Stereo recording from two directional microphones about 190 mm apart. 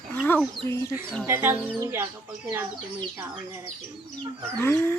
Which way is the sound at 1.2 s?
10° right (ahead or behind).